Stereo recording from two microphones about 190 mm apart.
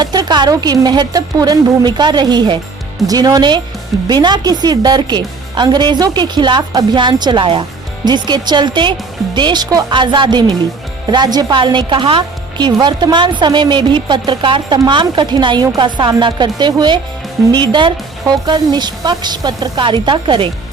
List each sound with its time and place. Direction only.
0.0 s speech: 20° right (ahead or behind)